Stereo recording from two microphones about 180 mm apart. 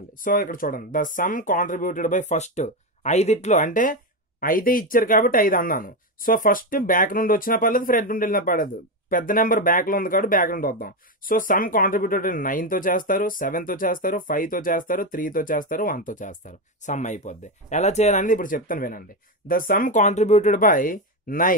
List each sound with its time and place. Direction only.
0.2 s speech: 50° left (ahead or behind)